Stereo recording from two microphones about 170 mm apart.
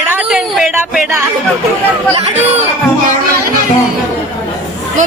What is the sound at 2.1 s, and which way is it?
Speech, 40° right (ahead or behind).